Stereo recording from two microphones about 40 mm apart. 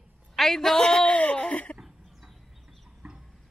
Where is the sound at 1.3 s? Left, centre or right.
Left.